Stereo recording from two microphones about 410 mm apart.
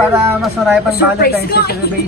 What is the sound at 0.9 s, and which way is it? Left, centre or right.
Speech, left.